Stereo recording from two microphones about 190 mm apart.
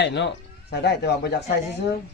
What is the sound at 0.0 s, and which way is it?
A man's voice, 65° left (ahead or behind).